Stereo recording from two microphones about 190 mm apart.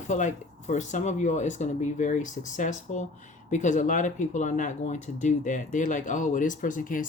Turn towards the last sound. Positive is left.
turn(degrees=45)  # may be behind; listen again after turning